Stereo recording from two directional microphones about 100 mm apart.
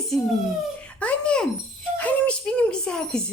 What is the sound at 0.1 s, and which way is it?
Speech, 5° left (ahead or behind).